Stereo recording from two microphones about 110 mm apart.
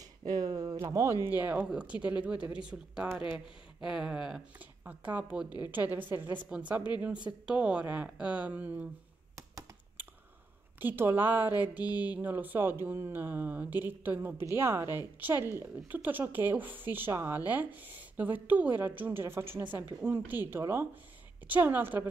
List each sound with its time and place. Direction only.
0.3 s speech: 35° right (ahead or behind)
1.2 s a woman's voice: 15° right (ahead or behind)
10.8 s a woman's voice: 20° right (ahead or behind)